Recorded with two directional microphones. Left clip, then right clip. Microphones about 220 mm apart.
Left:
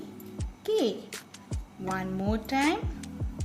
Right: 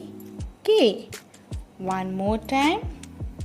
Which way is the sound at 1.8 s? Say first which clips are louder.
Right 6 dB; 25° right (ahead or behind).